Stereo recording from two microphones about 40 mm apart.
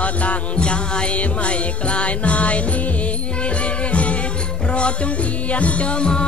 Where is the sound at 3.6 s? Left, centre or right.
Left.